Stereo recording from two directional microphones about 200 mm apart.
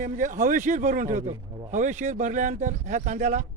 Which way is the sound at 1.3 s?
15° right (ahead or behind).